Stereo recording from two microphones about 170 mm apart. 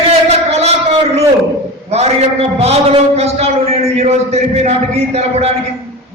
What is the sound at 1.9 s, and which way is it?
A man's voice, 40° right (ahead or behind).